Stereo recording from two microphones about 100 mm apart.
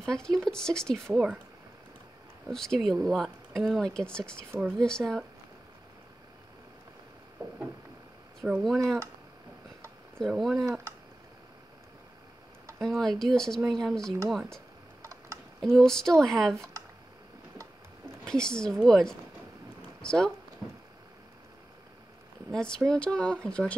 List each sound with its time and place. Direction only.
0.0 s speech: 5° left (ahead or behind)
2.4 s speech: 5° left (ahead or behind)
8.5 s speech: centre (ahead or behind)
10.1 s speech: centre (ahead or behind)
10.6 s speech: 30° right (ahead or behind)
12.8 s speech: 5° left (ahead or behind)
15.6 s speech: 5° left (ahead or behind)
18.2 s a woman's voice: 5° left (ahead or behind)
22.5 s speech: 10° left (ahead or behind)